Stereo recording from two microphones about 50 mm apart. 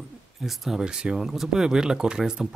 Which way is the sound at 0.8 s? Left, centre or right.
Centre.